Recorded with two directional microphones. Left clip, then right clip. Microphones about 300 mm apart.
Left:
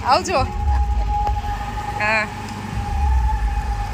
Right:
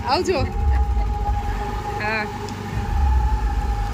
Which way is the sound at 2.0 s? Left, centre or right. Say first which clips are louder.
Left 6 dB; centre.